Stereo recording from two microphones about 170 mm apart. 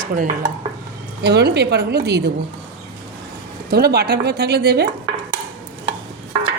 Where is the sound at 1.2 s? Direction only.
75° right (ahead or behind).